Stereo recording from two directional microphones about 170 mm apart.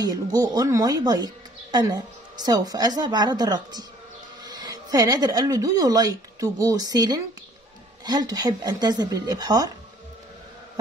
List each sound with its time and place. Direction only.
0.1 s speech: 20° right (ahead or behind)